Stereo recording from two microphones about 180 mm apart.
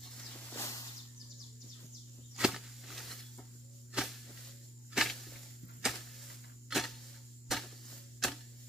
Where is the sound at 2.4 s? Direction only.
Centre (ahead or behind).